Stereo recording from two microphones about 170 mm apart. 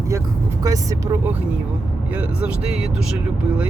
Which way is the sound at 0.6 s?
20° right (ahead or behind).